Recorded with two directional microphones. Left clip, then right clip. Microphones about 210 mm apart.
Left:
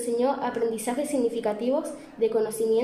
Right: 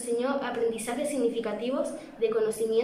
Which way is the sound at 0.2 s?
25° left (ahead or behind).